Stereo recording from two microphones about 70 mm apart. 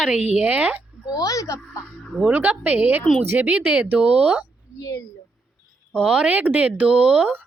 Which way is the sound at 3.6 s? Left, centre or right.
Centre.